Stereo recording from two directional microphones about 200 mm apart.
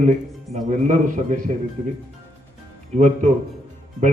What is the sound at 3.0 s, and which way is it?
Speech, 35° right (ahead or behind).